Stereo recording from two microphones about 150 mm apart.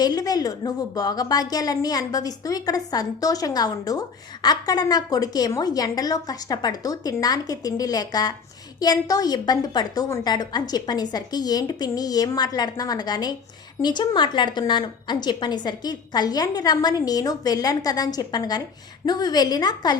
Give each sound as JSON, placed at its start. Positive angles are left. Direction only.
{"t": 0.0, "sound": "a woman's voice", "side_deg": 25}